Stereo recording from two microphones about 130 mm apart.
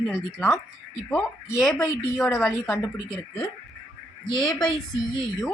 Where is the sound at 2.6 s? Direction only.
5° left (ahead or behind).